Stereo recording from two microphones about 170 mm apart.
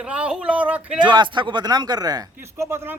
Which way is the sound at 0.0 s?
5° right (ahead or behind).